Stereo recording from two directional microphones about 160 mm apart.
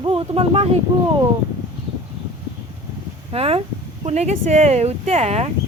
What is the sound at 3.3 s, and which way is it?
Speech, 40° right (ahead or behind).